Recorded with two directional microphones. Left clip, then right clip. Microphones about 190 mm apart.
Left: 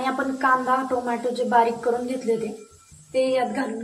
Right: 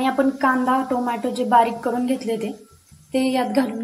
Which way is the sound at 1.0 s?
45° right (ahead or behind).